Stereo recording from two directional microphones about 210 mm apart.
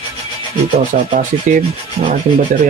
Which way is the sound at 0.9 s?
35° right (ahead or behind).